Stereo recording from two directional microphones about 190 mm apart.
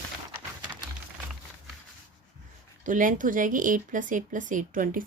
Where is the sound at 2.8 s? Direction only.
45° right (ahead or behind).